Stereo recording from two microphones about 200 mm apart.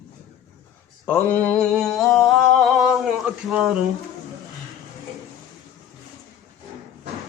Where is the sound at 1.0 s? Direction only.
10° left (ahead or behind).